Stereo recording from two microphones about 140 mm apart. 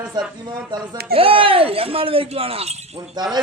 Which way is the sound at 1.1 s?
40° right (ahead or behind).